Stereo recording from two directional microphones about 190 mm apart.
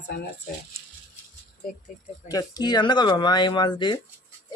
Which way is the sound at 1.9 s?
45° left (ahead or behind).